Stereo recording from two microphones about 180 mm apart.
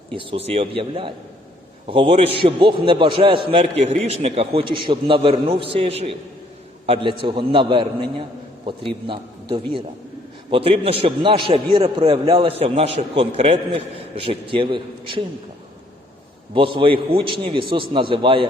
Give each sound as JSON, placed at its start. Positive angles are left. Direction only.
{"t": 0.2, "sound": "a man's voice", "side_deg": -30}
{"t": 16.6, "sound": "a man's voice", "side_deg": -30}